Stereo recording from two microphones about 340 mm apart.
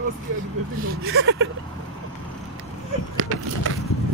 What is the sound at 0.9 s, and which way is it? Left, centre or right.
Speech, right.